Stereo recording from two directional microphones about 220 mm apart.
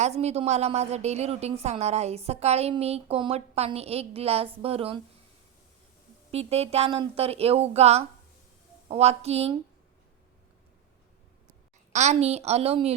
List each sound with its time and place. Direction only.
0.0 s a woman's voice: 30° right (ahead or behind)
6.3 s a woman's voice: 30° right (ahead or behind)
11.9 s a woman's voice: 30° right (ahead or behind)